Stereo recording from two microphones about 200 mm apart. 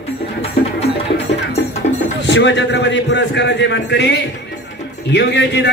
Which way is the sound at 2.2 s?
60° left (ahead or behind).